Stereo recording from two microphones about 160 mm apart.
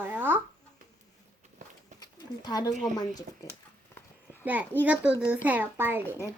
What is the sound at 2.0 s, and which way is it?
Pigeon, 25° left (ahead or behind).